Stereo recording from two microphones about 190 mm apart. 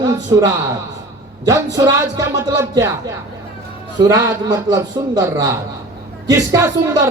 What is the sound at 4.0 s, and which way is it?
A man's voice, 20° right (ahead or behind).